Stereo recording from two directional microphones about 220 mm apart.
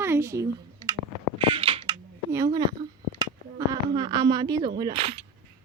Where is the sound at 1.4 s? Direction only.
25° right (ahead or behind).